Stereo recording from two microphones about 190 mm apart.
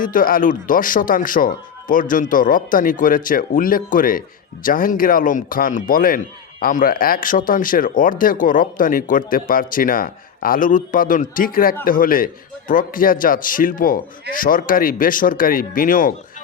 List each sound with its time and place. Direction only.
0.0 s a man's voice: 45° left (ahead or behind)